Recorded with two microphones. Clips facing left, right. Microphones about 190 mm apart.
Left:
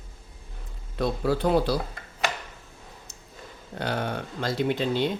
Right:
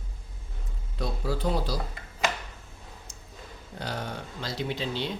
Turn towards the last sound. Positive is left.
turn(degrees=50)  # may be behind; listen again after turning